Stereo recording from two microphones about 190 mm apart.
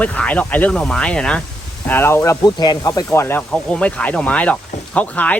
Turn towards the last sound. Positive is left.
turn(degrees=5)  # may be behind; listen again after turning